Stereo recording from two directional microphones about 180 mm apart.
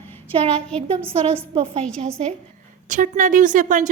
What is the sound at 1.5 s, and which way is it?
Speech, 30° right (ahead or behind).